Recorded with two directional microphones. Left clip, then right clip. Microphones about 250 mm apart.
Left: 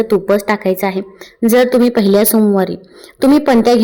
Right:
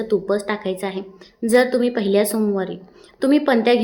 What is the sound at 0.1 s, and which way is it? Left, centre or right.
A woman's voice, left.